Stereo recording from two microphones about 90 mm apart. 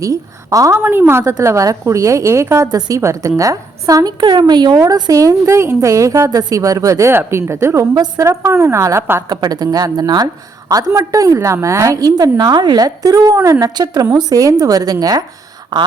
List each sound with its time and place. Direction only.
0.0 s a woman's voice: 40° right (ahead or behind)
0.8 s a woman's voice: 25° right (ahead or behind)
2.7 s a woman's voice: 45° right (ahead or behind)
3.0 s a woman's voice: 35° right (ahead or behind)
7.1 s a woman's voice: 25° right (ahead or behind)
7.9 s a woman's voice: 50° right (ahead or behind)
8.2 s a woman's voice: 30° right (ahead or behind)
9.3 s a woman's voice: 50° right (ahead or behind)
15.7 s a sound: 55° right (ahead or behind)